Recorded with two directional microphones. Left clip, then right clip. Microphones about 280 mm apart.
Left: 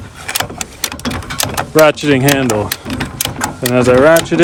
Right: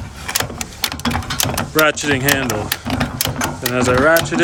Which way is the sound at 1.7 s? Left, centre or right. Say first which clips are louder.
Left 7 dB; centre.